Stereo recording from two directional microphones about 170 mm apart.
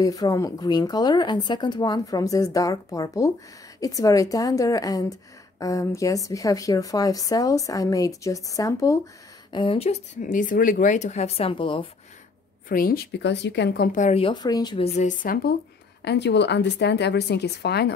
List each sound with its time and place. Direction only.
0.0 s a woman's voice: 20° left (ahead or behind)
9.5 s speech: 30° left (ahead or behind)
12.6 s speech: 55° left (ahead or behind); by 13.8 s 80° left
13.9 s a woman's voice: 40° left (ahead or behind); by 14.9 s 25° left (ahead or behind)
15.0 s speech: 50° left (ahead or behind)
16.0 s speech: 85° left